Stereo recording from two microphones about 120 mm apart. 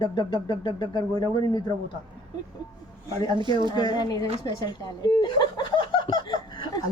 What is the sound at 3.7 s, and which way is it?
Speech, 35° left (ahead or behind).